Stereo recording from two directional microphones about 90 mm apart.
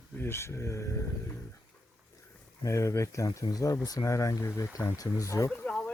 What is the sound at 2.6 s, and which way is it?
Speech, 35° left (ahead or behind).